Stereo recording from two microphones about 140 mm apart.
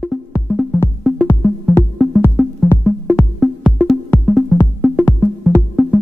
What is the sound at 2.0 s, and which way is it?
Music, centre (ahead or behind).